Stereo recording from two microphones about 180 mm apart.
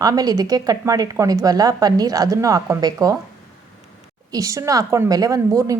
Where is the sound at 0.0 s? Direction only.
20° right (ahead or behind).